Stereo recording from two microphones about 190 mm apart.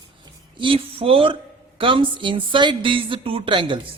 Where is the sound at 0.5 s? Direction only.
25° right (ahead or behind).